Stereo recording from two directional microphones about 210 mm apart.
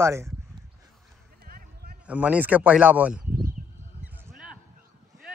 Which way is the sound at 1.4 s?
45° right (ahead or behind).